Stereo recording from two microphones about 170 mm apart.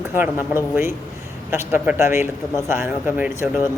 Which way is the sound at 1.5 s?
10° right (ahead or behind).